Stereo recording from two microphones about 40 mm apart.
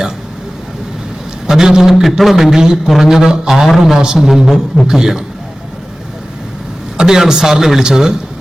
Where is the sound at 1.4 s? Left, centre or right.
Centre.